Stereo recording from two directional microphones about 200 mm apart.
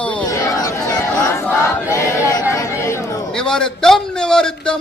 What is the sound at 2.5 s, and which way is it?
Chatter, 15° left (ahead or behind).